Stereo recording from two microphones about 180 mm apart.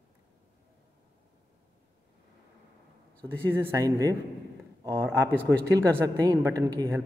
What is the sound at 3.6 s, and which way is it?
Speech, 15° right (ahead or behind).